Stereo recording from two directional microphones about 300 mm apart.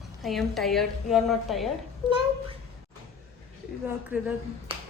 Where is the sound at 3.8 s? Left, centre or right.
Centre.